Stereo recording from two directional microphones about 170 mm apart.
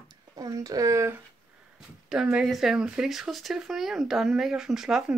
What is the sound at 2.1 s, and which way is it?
Speech, 5° right (ahead or behind).